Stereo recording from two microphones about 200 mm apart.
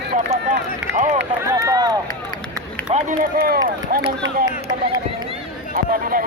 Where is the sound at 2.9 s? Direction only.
45° right (ahead or behind).